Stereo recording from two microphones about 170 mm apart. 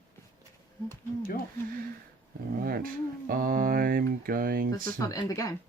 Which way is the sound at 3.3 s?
55° right (ahead or behind).